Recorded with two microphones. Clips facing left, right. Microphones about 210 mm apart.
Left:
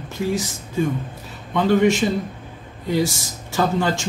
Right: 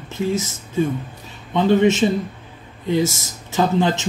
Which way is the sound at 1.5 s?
20° right (ahead or behind).